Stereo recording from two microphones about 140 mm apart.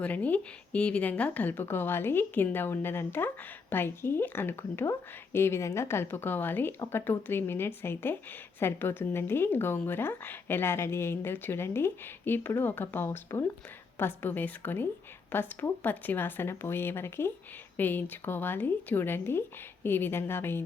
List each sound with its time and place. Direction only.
0.0 s a woman's voice: 10° left (ahead or behind)